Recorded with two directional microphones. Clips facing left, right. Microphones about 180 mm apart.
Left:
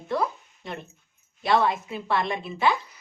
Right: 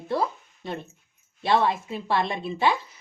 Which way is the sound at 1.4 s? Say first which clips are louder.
Even; 30° right (ahead or behind).